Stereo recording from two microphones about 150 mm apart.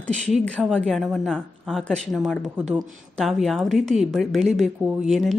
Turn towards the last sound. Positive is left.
turn(degrees=0)  # may be behind; listen again after turning